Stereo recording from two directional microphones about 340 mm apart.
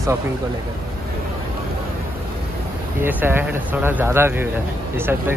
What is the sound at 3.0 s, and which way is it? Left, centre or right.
Speech, centre.